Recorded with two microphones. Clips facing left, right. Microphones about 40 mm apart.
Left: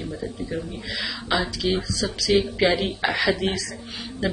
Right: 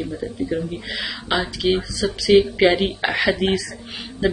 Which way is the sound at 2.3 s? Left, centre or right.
Right.